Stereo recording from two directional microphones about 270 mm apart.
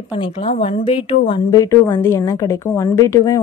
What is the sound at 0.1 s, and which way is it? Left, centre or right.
A woman's voice, centre.